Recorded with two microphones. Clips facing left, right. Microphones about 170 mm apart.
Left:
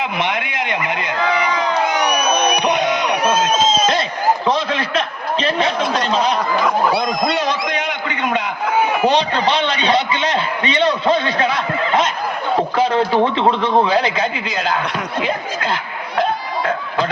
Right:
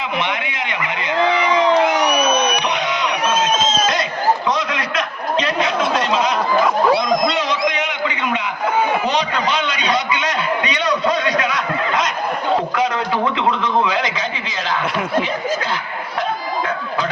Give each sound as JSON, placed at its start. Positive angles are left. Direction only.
{"t": 0.3, "sound": "speech", "side_deg": 55}
{"t": 1.9, "sound": "crowd", "side_deg": -5}
{"t": 2.7, "sound": "music", "side_deg": 50}
{"t": 4.4, "sound": "a sound", "side_deg": 30}
{"t": 6.1, "sound": "speech", "side_deg": 35}
{"t": 6.9, "sound": "speech", "side_deg": 60}
{"t": 7.7, "sound": "a sound", "side_deg": 55}
{"t": 9.1, "sound": "a sound", "side_deg": 30}
{"t": 12.7, "sound": "a man's voice", "side_deg": 30}